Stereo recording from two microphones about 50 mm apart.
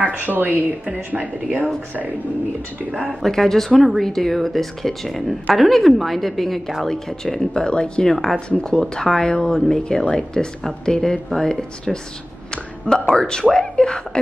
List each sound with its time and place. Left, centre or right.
0.2 s speech: right
3.1 s speech: centre
8.1 s speech: centre
8.5 s speech: centre